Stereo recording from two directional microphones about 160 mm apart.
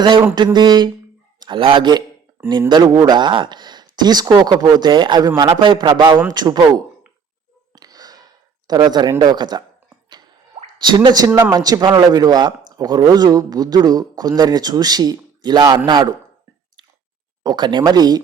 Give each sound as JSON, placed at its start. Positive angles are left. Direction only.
{"t": 0.3, "sound": "a man's voice", "side_deg": -25}
{"t": 7.8, "sound": "a sound", "side_deg": -25}
{"t": 10.8, "sound": "speech", "side_deg": -30}
{"t": 11.3, "sound": "speech", "side_deg": -10}
{"t": 11.5, "sound": "speech", "side_deg": -25}
{"t": 17.4, "sound": "speech", "side_deg": -25}